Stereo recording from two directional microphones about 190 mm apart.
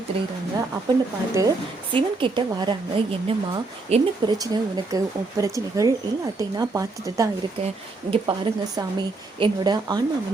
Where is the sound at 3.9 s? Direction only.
35° right (ahead or behind).